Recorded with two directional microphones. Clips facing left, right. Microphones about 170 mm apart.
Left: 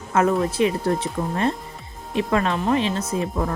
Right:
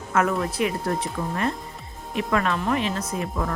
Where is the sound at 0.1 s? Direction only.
25° left (ahead or behind).